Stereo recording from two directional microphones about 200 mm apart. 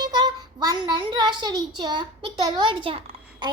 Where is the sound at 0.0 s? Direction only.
20° right (ahead or behind).